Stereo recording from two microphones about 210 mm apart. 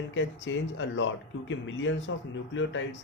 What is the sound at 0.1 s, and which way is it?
Speech, 60° left (ahead or behind).